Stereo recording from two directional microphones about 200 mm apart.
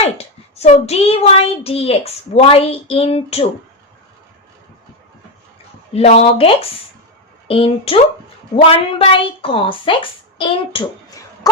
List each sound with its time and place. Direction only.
0.0 s child singing: 30° left (ahead or behind)
5.9 s child singing: 30° left (ahead or behind)